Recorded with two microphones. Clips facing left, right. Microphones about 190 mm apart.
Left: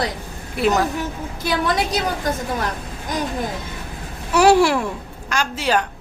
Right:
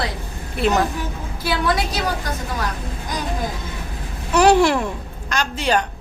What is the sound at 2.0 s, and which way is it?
Speech, 25° left (ahead or behind).